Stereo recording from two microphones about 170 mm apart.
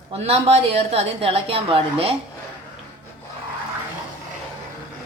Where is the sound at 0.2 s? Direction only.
40° right (ahead or behind).